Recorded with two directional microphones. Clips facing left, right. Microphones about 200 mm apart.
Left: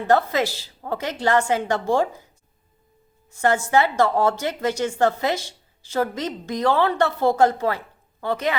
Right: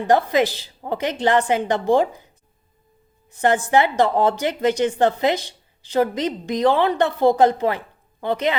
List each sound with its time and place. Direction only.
0.1 s speech: 15° right (ahead or behind)
3.2 s speech: 20° right (ahead or behind)